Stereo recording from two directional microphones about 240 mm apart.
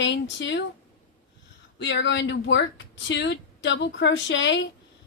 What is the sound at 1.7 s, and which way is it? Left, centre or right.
A woman's voice, left.